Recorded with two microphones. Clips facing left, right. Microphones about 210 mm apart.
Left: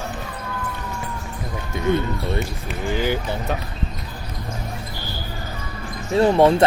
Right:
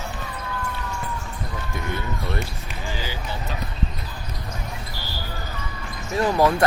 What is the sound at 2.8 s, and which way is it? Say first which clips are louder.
Speech: left 10 dB; 55° left (ahead or behind).